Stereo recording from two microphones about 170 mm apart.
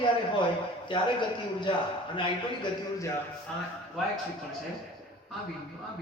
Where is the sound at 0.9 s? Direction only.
30° left (ahead or behind).